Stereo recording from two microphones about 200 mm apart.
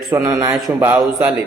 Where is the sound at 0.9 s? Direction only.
5° right (ahead or behind).